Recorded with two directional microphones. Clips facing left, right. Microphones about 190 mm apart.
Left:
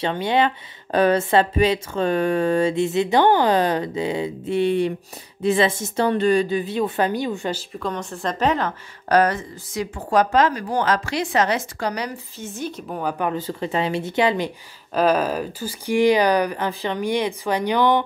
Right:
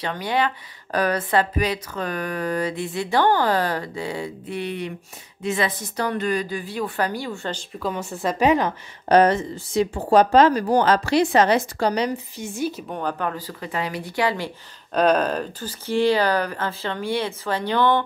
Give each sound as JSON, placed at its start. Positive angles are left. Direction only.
{"t": 0.0, "sound": "speech", "side_deg": 25}
{"t": 7.7, "sound": "a woman's voice", "side_deg": -5}
{"t": 9.1, "sound": "speech", "side_deg": -25}
{"t": 12.4, "sound": "speech", "side_deg": -10}
{"t": 13.2, "sound": "speech", "side_deg": 20}
{"t": 15.0, "sound": "speech", "side_deg": 5}